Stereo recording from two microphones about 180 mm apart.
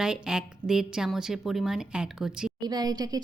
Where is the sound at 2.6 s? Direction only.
20° right (ahead or behind).